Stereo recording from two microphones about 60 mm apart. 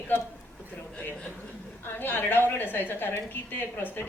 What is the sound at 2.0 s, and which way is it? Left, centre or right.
A woman's voice, left.